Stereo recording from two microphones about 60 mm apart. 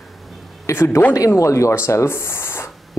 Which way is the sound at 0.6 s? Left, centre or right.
Left.